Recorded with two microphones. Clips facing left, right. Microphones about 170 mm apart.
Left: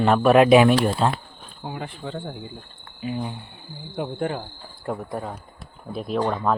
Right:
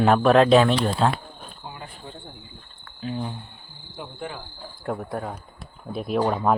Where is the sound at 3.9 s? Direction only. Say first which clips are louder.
Left 8 dB; 55° left (ahead or behind).